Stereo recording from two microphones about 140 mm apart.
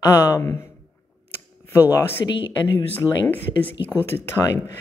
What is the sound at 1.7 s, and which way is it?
Speech, 20° left (ahead or behind).